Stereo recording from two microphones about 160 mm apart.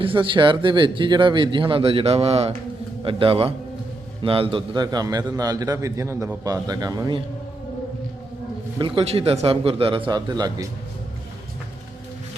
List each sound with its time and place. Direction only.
0.0 s a man's voice: 30° right (ahead or behind)
8.8 s speech: 35° right (ahead or behind)